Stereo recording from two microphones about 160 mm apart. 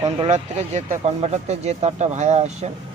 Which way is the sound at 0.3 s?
45° right (ahead or behind).